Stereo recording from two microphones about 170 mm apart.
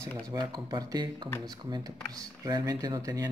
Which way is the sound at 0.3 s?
25° right (ahead or behind).